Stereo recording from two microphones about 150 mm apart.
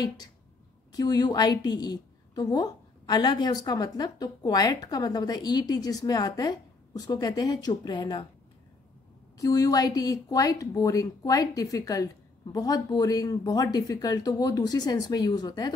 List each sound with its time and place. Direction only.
0.9 s a woman's voice: 25° left (ahead or behind)
9.4 s a woman's voice: 25° left (ahead or behind)